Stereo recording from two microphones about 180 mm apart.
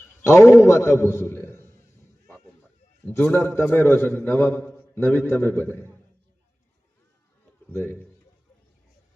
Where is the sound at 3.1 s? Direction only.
15° left (ahead or behind).